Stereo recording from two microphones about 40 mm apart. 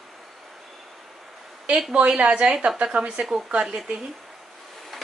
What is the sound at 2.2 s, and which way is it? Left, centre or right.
A woman's voice, right.